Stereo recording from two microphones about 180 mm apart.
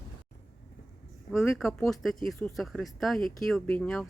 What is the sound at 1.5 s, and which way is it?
Speech, centre (ahead or behind).